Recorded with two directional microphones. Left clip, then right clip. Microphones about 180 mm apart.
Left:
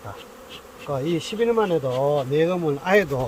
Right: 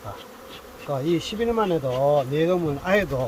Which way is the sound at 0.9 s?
30° left (ahead or behind).